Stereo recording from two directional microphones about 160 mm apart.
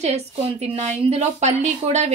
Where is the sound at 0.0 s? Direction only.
40° right (ahead or behind).